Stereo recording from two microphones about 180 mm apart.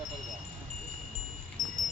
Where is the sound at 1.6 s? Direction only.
45° right (ahead or behind).